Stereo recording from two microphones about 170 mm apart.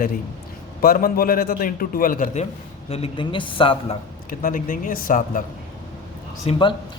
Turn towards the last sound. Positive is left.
turn(degrees=30)  # may be behind; listen again after turning